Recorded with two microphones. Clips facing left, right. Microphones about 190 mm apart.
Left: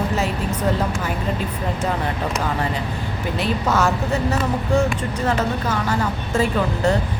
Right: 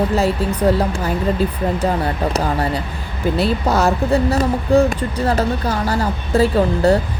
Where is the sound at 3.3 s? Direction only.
35° right (ahead or behind).